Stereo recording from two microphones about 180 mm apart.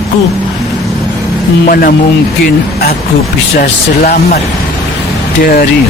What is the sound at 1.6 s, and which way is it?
Speech, 55° left (ahead or behind).